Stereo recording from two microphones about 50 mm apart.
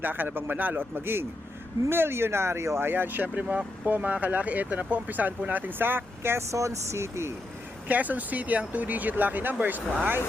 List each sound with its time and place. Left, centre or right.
0.0 s a man's voice: right
2.9 s speech: right
3.4 s speech: right
3.8 s a man's voice: right
6.5 s speech: right
7.9 s speech: right